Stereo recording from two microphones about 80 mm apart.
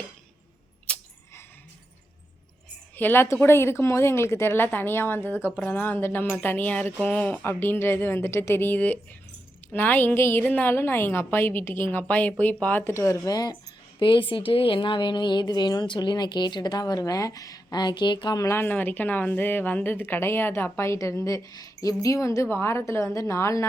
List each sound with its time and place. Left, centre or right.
0.9 s a sound: centre
2.9 s a woman's voice: left
12.8 s speech: left
13.3 s speech: left
14.0 s a woman's voice: left
18.5 s a woman's voice: left
21.2 s speech: left